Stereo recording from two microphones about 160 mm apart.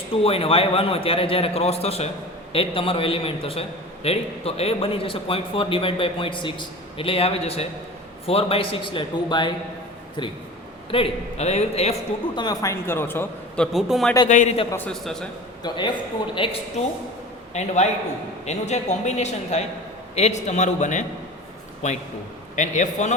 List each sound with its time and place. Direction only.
0.1 s a man's voice: 35° left (ahead or behind)
10.9 s a man's voice: 40° left (ahead or behind)
12.4 s a man's voice: 20° left (ahead or behind)
13.7 s speech: centre (ahead or behind)
14.3 s a woman's voice: 50° left (ahead or behind)
14.7 s a man's voice: 10° left (ahead or behind)
15.6 s a man's voice: 30° left (ahead or behind)
17.5 s a woman's voice: 45° left (ahead or behind)
22.5 s a woman's voice: 50° left (ahead or behind)